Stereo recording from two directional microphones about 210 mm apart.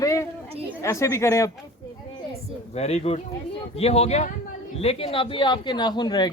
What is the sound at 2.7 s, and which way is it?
A man's voice, 30° left (ahead or behind).